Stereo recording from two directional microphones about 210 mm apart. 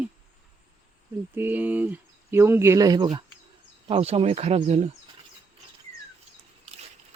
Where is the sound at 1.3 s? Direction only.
10° right (ahead or behind); by 4.8 s 30° right (ahead or behind).